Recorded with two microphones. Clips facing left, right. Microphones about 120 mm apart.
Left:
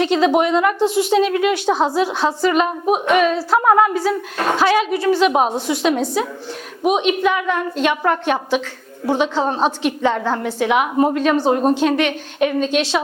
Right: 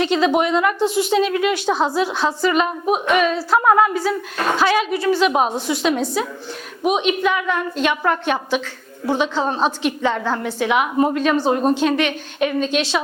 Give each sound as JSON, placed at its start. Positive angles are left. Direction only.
{"t": 0.0, "sound": "a woman's voice", "side_deg": 50}
{"t": 1.6, "sound": "a woman's voice", "side_deg": 25}
{"t": 2.4, "sound": "a woman's voice", "side_deg": 45}
{"t": 9.3, "sound": "a woman's voice", "side_deg": 40}
{"t": 9.6, "sound": "a woman's voice", "side_deg": 50}
{"t": 11.8, "sound": "a woman's voice", "side_deg": 50}